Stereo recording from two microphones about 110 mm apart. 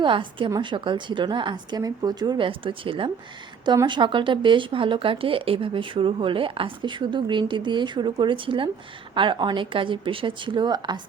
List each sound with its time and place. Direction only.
0.0 s a woman's voice: 50° right (ahead or behind)
2.5 s speech: 50° right (ahead or behind)